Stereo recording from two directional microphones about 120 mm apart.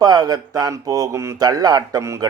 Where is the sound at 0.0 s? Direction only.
35° right (ahead or behind).